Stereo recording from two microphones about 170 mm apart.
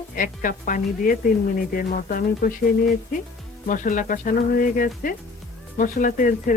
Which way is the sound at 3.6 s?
50° left (ahead or behind).